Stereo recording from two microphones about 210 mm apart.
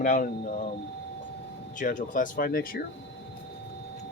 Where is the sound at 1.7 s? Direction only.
40° left (ahead or behind).